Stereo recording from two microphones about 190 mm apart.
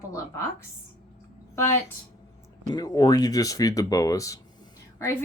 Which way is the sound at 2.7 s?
20° left (ahead or behind).